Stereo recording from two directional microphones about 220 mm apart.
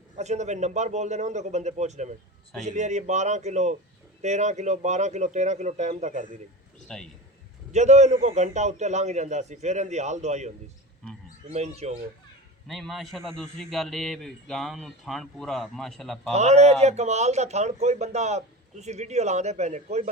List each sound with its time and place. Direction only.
0.2 s a man's voice: 30° right (ahead or behind)
6.8 s a man's voice: centre (ahead or behind)
7.7 s a man's voice: 30° right (ahead or behind)
12.6 s a man's voice: centre (ahead or behind)
16.3 s a man's voice: 30° right (ahead or behind)